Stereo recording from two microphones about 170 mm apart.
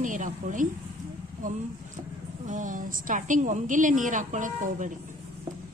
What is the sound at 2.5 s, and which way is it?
A woman's voice, 50° right (ahead or behind).